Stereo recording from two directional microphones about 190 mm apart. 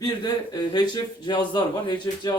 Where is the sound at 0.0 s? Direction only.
20° left (ahead or behind).